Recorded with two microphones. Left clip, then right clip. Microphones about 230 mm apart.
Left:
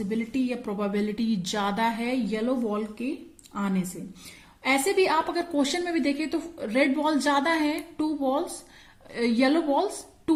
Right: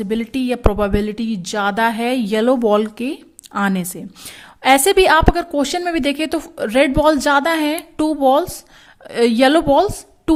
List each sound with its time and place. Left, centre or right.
0.1 s a woman's voice: right